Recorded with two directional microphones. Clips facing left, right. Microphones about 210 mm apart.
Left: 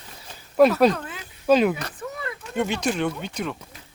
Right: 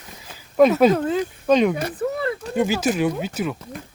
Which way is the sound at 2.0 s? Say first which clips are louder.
Right 9 dB; 30° right (ahead or behind).